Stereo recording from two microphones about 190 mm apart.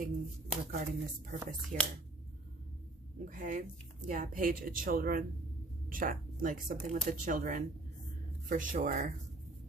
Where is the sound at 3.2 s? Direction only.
45° right (ahead or behind).